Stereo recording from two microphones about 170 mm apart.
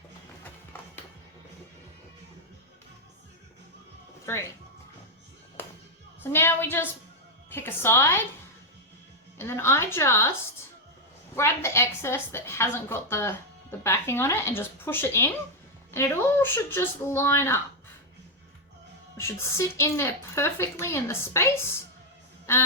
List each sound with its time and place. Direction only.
6.2 s a woman's voice: 15° left (ahead or behind)
9.4 s a woman's voice: 15° left (ahead or behind)
11.3 s a woman's voice: 15° left (ahead or behind)
19.1 s a woman's voice: 15° left (ahead or behind)